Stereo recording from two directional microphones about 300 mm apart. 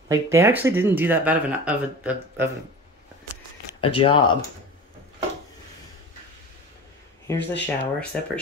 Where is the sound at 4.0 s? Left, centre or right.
Centre.